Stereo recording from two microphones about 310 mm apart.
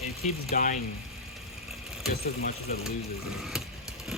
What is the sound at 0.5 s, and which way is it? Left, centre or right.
Speech, left.